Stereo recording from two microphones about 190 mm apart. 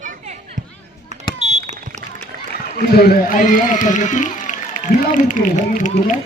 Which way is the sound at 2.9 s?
50° left (ahead or behind).